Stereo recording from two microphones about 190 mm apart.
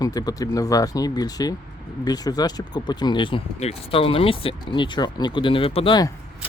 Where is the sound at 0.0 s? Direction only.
20° left (ahead or behind).